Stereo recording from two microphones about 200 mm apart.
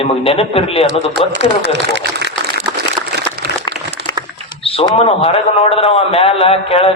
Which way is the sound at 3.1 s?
55° right (ahead or behind).